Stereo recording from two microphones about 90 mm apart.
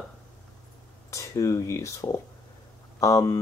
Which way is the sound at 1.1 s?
35° left (ahead or behind).